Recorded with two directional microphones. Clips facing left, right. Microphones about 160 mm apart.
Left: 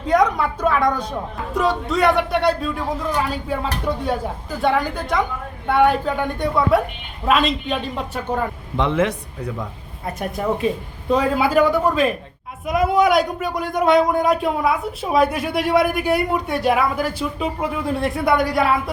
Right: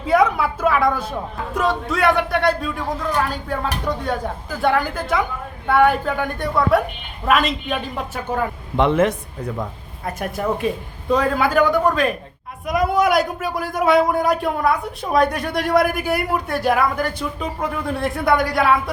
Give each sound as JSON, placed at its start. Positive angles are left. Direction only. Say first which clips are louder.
{"t": 0.0, "sound": "a man's voice", "louder": "right 1 dB", "side_deg": -5}
{"t": 8.7, "sound": "speech", "louder": "right 3 dB", "side_deg": -50}
{"t": 10.2, "sound": "a man's voice", "louder": "left 1 dB", "side_deg": 0}